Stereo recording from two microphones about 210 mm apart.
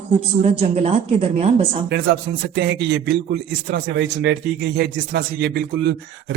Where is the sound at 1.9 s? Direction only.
55° right (ahead or behind).